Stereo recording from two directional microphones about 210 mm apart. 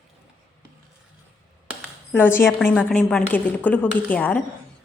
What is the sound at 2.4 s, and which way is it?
A woman's voice, 5° left (ahead or behind).